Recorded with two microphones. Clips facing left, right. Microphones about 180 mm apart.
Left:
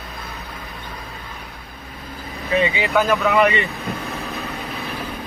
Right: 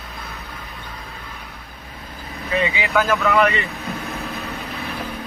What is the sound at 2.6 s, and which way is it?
Speech, centre (ahead or behind).